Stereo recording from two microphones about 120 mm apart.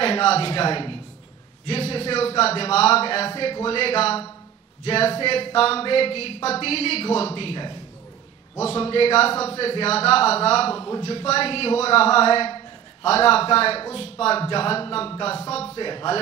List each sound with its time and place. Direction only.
0.0 s a man's voice: 55° left (ahead or behind)
10.8 s speech: 35° left (ahead or behind)
11.1 s speech: 55° left (ahead or behind)
15.7 s speech: 40° left (ahead or behind)